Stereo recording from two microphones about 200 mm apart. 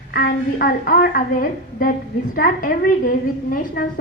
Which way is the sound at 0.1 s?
50° left (ahead or behind).